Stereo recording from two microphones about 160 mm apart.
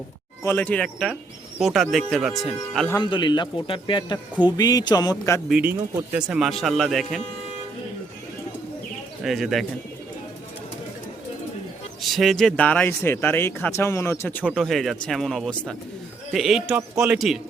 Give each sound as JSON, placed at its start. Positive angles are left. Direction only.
{"t": 0.4, "sound": "speech", "side_deg": 10}
{"t": 3.0, "sound": "speech", "side_deg": 30}
{"t": 5.5, "sound": "speech", "side_deg": -5}
{"t": 9.2, "sound": "speech", "side_deg": 0}
{"t": 12.0, "sound": "speech", "side_deg": 0}